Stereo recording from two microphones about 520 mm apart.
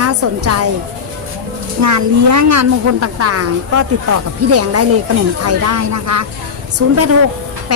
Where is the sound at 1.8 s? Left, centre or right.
Right.